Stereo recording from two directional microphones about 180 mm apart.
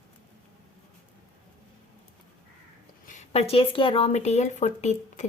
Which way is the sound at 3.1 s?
35° left (ahead or behind).